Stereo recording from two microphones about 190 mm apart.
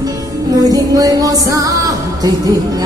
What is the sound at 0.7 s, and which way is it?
Music, 20° right (ahead or behind).